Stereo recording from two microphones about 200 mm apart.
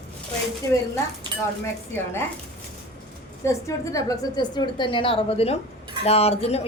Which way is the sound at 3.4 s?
15° left (ahead or behind).